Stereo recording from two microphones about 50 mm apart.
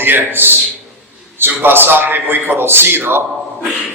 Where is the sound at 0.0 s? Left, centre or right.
Right.